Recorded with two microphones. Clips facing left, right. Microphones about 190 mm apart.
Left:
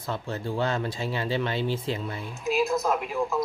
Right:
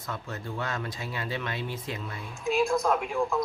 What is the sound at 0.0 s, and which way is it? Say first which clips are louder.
Speech: left 5 dB; 30° left (ahead or behind).